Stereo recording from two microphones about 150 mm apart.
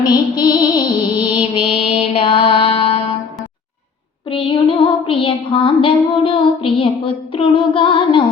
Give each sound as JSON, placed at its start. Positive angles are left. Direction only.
{"t": 0.0, "sound": "music", "side_deg": 30}
{"t": 2.0, "sound": "mantra", "side_deg": 35}
{"t": 4.3, "sound": "child singing", "side_deg": 35}